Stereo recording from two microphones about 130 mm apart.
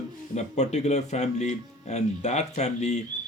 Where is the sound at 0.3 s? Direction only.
60° left (ahead or behind).